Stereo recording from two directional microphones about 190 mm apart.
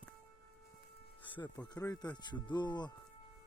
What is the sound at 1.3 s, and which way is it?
Speech, 20° left (ahead or behind).